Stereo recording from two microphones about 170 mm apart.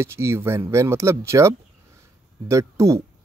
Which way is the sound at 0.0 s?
15° right (ahead or behind).